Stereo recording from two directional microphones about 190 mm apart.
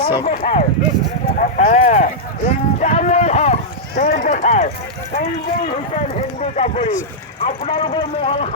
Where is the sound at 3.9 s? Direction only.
45° left (ahead or behind).